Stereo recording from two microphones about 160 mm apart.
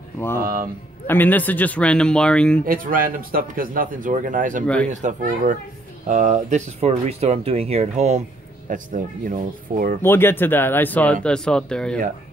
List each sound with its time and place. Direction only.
1.0 s speech: 10° left (ahead or behind)
2.6 s speech: 60° right (ahead or behind); by 8.2 s 45° right (ahead or behind)
8.6 s speech: 55° right (ahead or behind)
10.0 s speech: 15° left (ahead or behind)